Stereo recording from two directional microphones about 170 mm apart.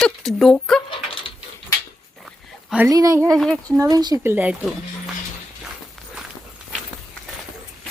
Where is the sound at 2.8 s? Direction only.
20° right (ahead or behind).